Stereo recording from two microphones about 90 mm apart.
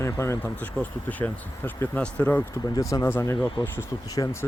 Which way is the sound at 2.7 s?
40° left (ahead or behind).